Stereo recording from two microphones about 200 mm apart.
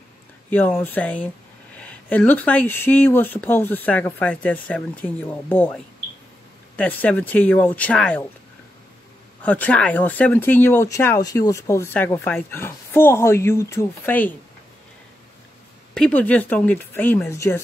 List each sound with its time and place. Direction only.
0.5 s speech: 10° left (ahead or behind)
6.8 s speech: 5° left (ahead or behind)
9.4 s speech: 10° left (ahead or behind)
15.9 s speech: 5° left (ahead or behind)